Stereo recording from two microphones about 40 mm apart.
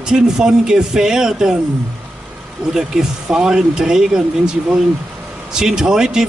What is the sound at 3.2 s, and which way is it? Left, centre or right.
Speech, centre.